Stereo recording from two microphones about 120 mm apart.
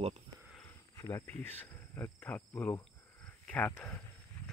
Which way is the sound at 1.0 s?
25° left (ahead or behind).